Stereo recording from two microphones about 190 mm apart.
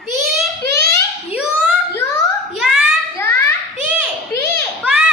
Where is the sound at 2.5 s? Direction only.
5° right (ahead or behind).